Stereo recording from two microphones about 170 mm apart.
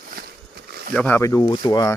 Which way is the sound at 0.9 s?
10° left (ahead or behind).